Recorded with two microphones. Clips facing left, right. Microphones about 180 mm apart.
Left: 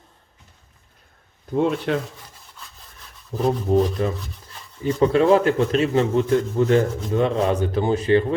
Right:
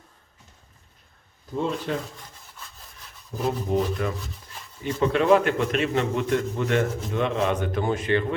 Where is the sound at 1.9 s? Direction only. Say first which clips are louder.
Left 5 dB; 75° left (ahead or behind).